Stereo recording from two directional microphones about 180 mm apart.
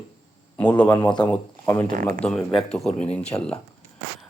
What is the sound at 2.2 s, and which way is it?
A man's voice, 5° left (ahead or behind).